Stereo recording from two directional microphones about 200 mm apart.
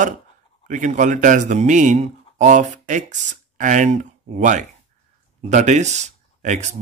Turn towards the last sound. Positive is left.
turn(degrees=-35)  # may be behind; listen again after turning